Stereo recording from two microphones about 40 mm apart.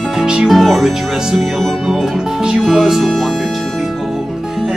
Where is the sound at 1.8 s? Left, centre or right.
Centre.